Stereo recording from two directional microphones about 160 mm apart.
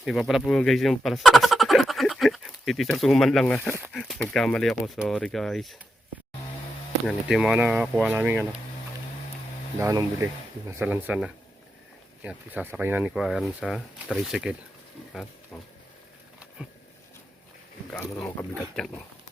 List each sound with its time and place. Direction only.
0.0 s speech: centre (ahead or behind)
7.1 s speech: 5° right (ahead or behind)
9.8 s speech: 20° right (ahead or behind); by 14.5 s 5° right (ahead or behind)
16.6 s a sound: 5° right (ahead or behind)
17.9 s speech: 15° left (ahead or behind)